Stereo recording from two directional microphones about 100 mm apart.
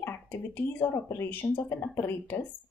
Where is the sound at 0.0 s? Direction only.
20° left (ahead or behind).